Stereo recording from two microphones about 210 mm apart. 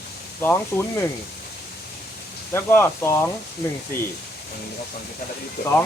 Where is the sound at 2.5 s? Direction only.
10° left (ahead or behind).